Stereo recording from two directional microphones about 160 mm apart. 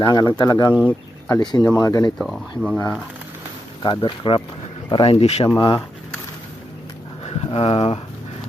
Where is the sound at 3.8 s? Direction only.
30° left (ahead or behind).